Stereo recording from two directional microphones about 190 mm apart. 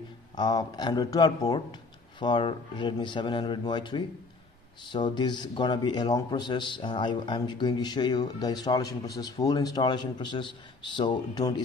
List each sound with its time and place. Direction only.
0.4 s a man's voice: 20° left (ahead or behind)